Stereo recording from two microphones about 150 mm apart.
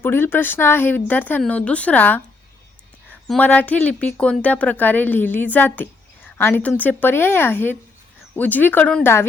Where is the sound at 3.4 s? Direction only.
10° left (ahead or behind).